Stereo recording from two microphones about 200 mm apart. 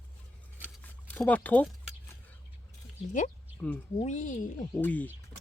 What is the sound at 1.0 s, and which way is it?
Speech, 5° left (ahead or behind).